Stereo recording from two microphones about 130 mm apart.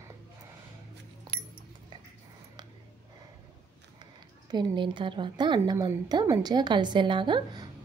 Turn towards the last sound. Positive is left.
turn(degrees=-35)  # may be behind; listen again after turning